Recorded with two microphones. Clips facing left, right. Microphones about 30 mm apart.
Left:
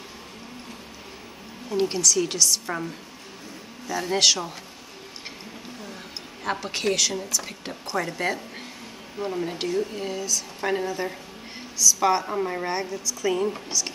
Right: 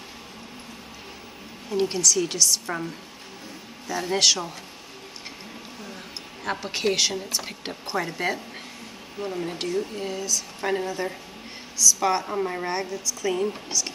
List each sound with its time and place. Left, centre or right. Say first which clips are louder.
1.7 s a woman's voice: even; centre
6.4 s a woman's voice: even; centre
7.4 s speech: right 1 dB; centre
8.0 s a woman's voice: left 1 dB; centre